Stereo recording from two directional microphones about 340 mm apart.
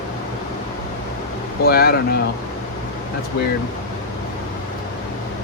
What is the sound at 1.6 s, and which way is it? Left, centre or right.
Speech, left.